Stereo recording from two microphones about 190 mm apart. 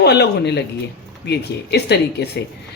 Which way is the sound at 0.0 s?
60° left (ahead or behind).